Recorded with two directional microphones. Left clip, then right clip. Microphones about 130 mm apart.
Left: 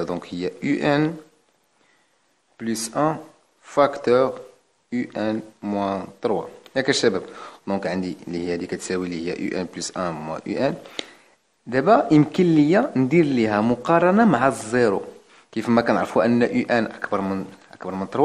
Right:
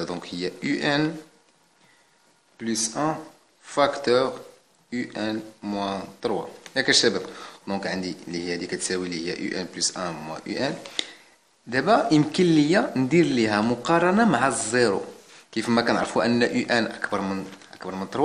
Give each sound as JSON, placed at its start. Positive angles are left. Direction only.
{"t": 0.0, "sound": "speech", "side_deg": 45}
{"t": 2.6, "sound": "speech", "side_deg": 75}
{"t": 2.9, "sound": "speech", "side_deg": 55}
{"t": 3.6, "sound": "speech", "side_deg": 45}
{"t": 11.0, "sound": "a sound", "side_deg": 45}
{"t": 11.7, "sound": "speech", "side_deg": 40}